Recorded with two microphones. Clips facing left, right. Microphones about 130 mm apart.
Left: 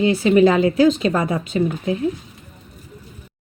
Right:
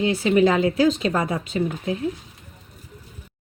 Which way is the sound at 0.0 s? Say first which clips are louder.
Left 4 dB; 70° left (ahead or behind).